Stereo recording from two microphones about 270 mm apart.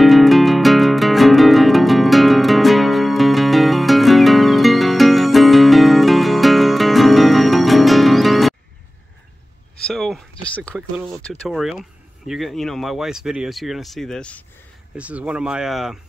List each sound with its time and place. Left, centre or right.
0.0 s music: centre
9.8 s a sound: centre
11.2 s speech: centre